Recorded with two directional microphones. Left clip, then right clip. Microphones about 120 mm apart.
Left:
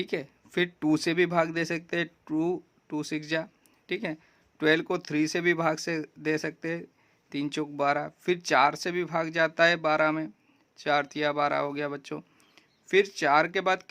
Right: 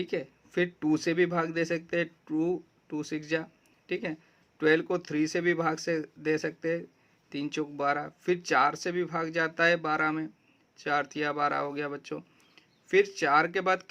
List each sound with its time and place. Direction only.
0.0 s speech: 35° left (ahead or behind)